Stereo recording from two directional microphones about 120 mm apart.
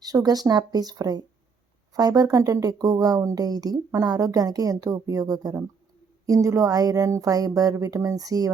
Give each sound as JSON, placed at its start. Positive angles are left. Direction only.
{"t": 0.0, "sound": "speech", "side_deg": -30}